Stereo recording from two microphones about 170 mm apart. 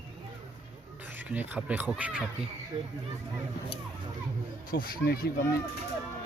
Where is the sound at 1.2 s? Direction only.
10° right (ahead or behind).